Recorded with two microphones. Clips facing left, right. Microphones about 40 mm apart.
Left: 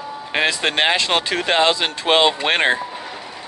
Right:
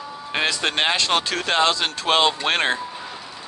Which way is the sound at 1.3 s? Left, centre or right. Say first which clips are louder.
Left 3 dB; left.